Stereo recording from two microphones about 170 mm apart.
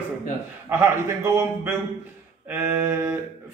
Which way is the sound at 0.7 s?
15° right (ahead or behind).